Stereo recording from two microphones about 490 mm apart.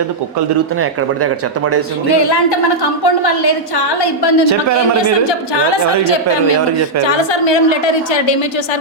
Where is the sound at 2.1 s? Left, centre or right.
Left.